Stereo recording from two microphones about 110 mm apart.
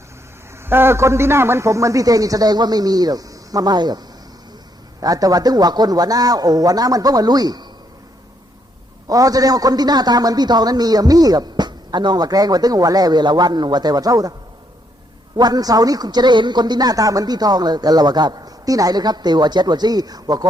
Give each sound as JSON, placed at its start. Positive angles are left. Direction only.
{"t": 0.6, "sound": "a man's voice", "side_deg": -20}
{"t": 9.0, "sound": "a man's voice", "side_deg": -35}
{"t": 15.4, "sound": "a man's voice", "side_deg": -35}